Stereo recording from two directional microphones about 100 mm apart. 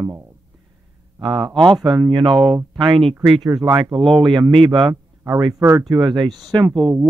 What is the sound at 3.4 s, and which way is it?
Speech, 40° right (ahead or behind).